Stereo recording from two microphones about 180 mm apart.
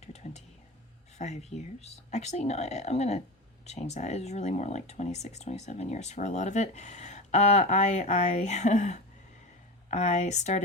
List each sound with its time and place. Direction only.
0.0 s whispering: 35° left (ahead or behind)
1.2 s speech: 40° left (ahead or behind)